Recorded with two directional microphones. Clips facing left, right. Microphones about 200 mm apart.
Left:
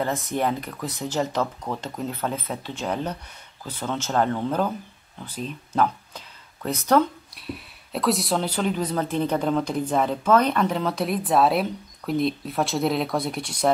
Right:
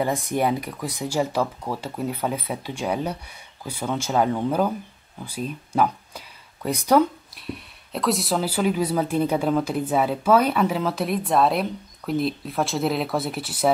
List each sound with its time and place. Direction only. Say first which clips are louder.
0.0 s speech: right 2 dB; 10° right (ahead or behind)
7.3 s speech: right 1 dB; centre (ahead or behind)